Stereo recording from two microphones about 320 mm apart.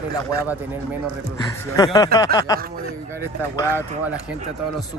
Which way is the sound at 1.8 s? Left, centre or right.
Centre.